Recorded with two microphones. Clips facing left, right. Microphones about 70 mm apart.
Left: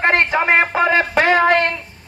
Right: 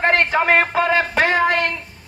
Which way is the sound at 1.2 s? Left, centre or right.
Left.